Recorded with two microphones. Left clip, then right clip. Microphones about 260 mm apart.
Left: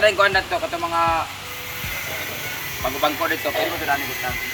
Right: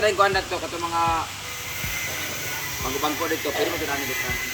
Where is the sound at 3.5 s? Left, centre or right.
Left.